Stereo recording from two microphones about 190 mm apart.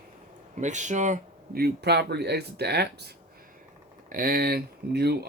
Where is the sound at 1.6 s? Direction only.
60° right (ahead or behind).